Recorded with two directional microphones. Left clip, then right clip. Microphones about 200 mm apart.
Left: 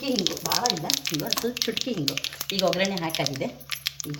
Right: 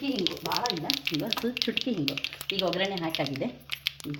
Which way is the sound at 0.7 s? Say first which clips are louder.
Left 2 dB; 20° left (ahead or behind).